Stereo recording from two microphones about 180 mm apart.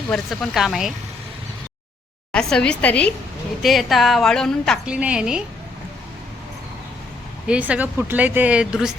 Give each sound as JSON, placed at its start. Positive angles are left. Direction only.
{"t": 0.1, "sound": "a woman's voice", "side_deg": 0}
{"t": 2.3, "sound": "a woman's voice", "side_deg": 5}
{"t": 7.4, "sound": "speech", "side_deg": -5}